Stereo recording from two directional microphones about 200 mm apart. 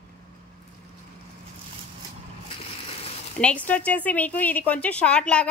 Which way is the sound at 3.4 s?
5° left (ahead or behind).